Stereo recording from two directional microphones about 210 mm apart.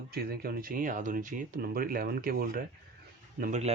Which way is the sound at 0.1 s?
45° right (ahead or behind).